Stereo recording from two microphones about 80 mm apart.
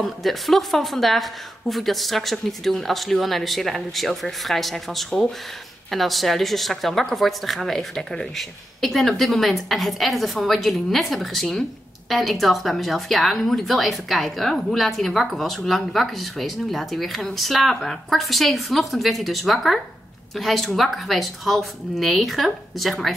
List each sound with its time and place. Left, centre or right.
0.0 s a woman's voice: centre